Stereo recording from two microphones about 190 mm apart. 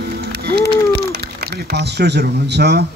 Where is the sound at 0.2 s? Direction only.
55° right (ahead or behind).